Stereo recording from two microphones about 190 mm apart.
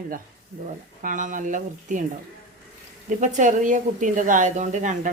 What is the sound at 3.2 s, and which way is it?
A woman's voice, 40° right (ahead or behind).